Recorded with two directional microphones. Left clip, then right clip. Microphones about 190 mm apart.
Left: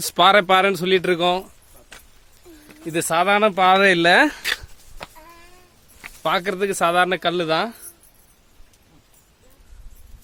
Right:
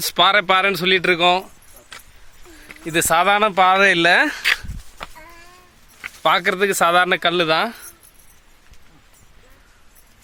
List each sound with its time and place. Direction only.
0.0 s speech: 20° left (ahead or behind)
2.8 s speech: 5° left (ahead or behind)
5.0 s a sound: 15° left (ahead or behind)
6.2 s speech: centre (ahead or behind)